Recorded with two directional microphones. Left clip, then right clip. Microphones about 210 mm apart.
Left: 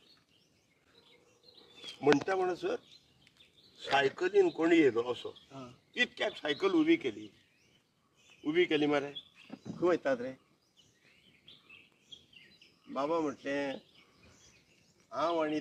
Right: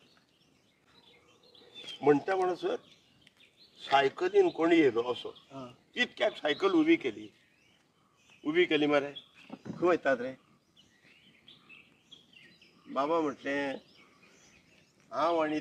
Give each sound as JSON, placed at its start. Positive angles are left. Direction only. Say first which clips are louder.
{"t": 1.9, "sound": "speech", "louder": "right 2 dB", "side_deg": 25}
{"t": 3.9, "sound": "speech", "louder": "right 2 dB", "side_deg": 15}
{"t": 5.5, "sound": "speech", "louder": "right 3 dB", "side_deg": -10}
{"t": 5.9, "sound": "speech", "louder": "right 2 dB", "side_deg": 10}
{"t": 8.4, "sound": "speech", "louder": "right 2 dB", "side_deg": 10}
{"t": 12.9, "sound": "speech", "louder": "right 3 dB", "side_deg": 10}
{"t": 15.1, "sound": "speech", "louder": "right 3 dB", "side_deg": 5}